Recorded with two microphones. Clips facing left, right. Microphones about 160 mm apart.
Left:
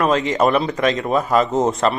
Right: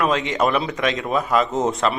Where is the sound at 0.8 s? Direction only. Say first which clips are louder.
Left 4 dB; 40° left (ahead or behind).